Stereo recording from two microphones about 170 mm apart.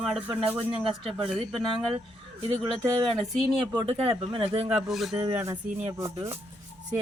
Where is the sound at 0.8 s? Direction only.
30° right (ahead or behind).